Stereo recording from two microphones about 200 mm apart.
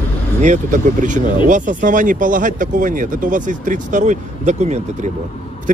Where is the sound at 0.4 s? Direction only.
40° right (ahead or behind).